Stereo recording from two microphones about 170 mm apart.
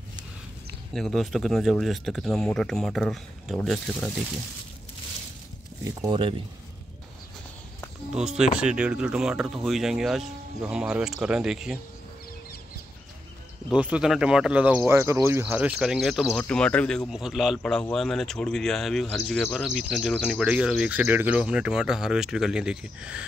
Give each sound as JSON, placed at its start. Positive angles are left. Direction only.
{"t": 0.9, "sound": "speech", "side_deg": 0}
{"t": 5.9, "sound": "speech", "side_deg": -25}
{"t": 8.1, "sound": "speech", "side_deg": -5}
{"t": 13.7, "sound": "speech", "side_deg": -5}